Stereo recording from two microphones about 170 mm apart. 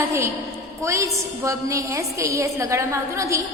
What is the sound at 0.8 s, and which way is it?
A woman's voice, 15° right (ahead or behind).